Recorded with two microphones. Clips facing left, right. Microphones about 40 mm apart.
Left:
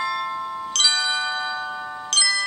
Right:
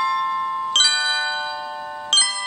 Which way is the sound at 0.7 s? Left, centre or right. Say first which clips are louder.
Right 1 dB; right.